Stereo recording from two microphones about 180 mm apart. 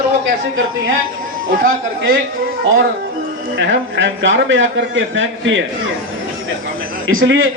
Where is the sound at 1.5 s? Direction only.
50° right (ahead or behind).